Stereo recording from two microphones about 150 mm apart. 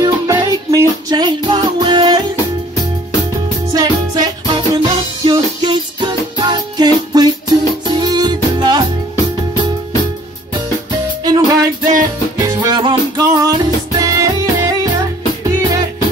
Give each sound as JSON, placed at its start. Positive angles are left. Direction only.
{"t": 0.0, "sound": "music", "side_deg": -25}
{"t": 3.7, "sound": "music", "side_deg": -25}
{"t": 11.2, "sound": "music", "side_deg": -25}